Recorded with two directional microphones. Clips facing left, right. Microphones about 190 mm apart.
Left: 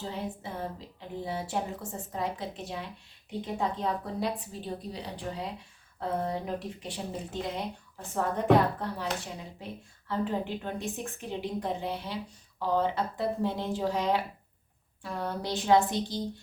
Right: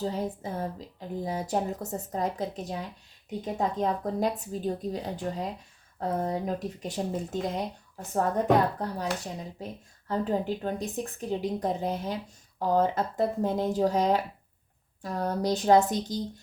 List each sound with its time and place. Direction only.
0.0 s a woman's voice: 40° right (ahead or behind)
8.1 s speech: 40° right (ahead or behind)
10.1 s speech: 40° right (ahead or behind)